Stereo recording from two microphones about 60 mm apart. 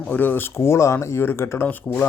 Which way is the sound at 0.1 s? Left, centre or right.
Left.